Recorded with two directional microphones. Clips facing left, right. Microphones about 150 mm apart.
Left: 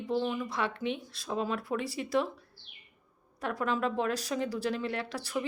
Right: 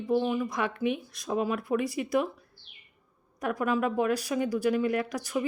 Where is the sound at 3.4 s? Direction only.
15° right (ahead or behind).